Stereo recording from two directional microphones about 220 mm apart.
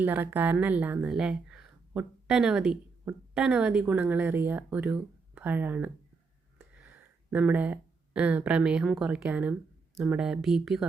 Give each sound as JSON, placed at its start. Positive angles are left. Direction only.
{"t": 0.0, "sound": "speech", "side_deg": -10}